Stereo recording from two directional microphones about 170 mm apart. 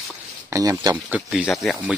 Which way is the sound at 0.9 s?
10° right (ahead or behind).